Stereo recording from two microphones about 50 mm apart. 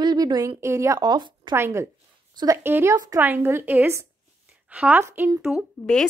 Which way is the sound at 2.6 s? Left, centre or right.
Right.